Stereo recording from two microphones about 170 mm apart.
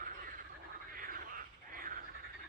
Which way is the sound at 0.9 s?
55° right (ahead or behind).